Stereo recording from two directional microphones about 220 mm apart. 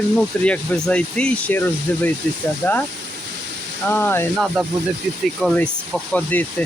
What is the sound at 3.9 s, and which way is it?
Speech, 10° left (ahead or behind).